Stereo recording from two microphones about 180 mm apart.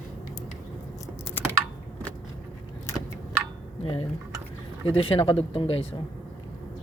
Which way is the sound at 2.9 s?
15° left (ahead or behind).